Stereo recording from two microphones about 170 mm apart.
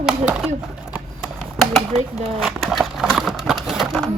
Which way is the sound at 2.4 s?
Centre (ahead or behind).